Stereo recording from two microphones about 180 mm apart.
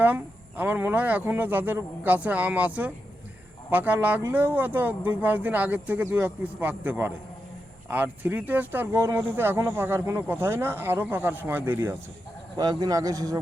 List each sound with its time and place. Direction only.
0.0 s a man's voice: 10° right (ahead or behind)